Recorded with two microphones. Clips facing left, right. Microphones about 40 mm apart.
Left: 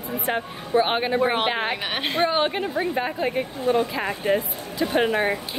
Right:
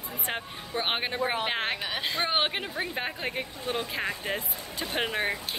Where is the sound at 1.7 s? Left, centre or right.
Left.